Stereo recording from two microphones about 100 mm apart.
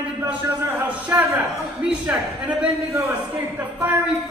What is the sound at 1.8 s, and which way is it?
Speech, 10° right (ahead or behind).